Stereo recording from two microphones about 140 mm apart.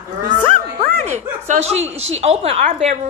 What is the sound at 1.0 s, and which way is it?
Speech, 55° right (ahead or behind).